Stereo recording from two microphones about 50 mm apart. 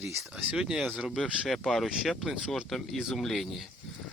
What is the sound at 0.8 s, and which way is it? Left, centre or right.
Speech, right.